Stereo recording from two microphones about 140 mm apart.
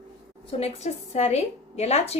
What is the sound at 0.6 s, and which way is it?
A woman's voice, 50° left (ahead or behind).